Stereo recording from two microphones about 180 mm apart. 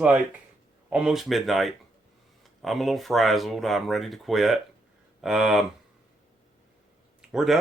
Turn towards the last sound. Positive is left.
turn(degrees=0)  # may be behind; listen again after turning